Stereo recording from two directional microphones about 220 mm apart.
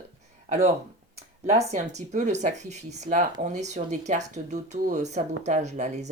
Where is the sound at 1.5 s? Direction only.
30° right (ahead or behind).